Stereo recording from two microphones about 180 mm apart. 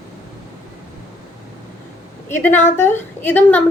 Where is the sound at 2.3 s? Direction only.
10° left (ahead or behind).